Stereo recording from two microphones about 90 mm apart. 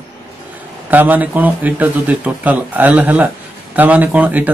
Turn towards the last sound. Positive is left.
turn(degrees=-15)  # may be behind; listen again after turning